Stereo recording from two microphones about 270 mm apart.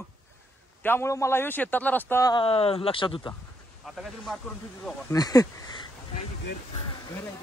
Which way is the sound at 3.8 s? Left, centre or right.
Centre.